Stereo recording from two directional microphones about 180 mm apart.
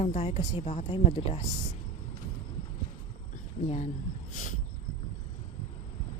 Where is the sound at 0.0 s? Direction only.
35° left (ahead or behind).